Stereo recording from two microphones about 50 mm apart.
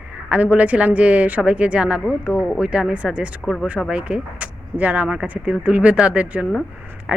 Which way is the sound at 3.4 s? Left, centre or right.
Centre.